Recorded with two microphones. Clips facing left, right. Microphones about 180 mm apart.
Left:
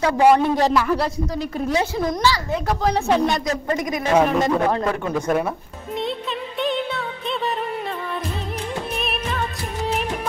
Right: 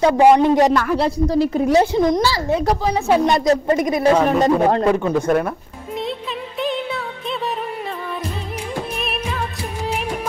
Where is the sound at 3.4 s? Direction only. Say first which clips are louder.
Right 7 dB; 30° right (ahead or behind).